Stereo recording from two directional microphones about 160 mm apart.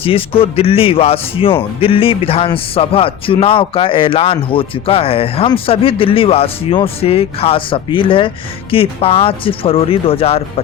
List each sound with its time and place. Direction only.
0.0 s a man's voice: 35° left (ahead or behind)